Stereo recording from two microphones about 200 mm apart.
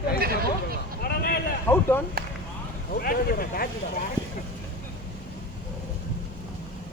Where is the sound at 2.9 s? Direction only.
45° left (ahead or behind).